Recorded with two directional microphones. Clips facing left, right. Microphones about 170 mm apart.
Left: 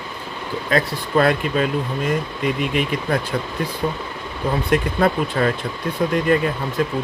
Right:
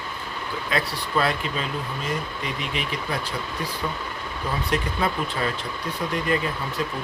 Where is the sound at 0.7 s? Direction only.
50° left (ahead or behind).